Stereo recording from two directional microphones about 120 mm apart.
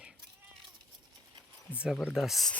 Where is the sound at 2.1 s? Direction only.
Centre (ahead or behind).